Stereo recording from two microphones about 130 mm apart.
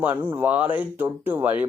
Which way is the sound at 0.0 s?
15° right (ahead or behind).